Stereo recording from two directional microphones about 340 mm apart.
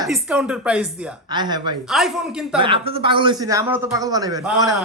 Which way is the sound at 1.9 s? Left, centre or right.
Centre.